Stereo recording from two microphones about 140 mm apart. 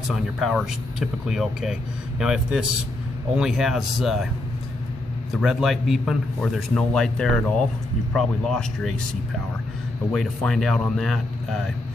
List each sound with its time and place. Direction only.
0.1 s speech: centre (ahead or behind)
5.3 s speech: centre (ahead or behind)
10.1 s speech: centre (ahead or behind)